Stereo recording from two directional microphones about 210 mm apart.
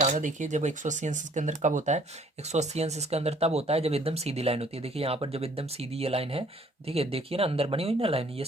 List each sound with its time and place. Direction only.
0.0 s speech: 35° right (ahead or behind)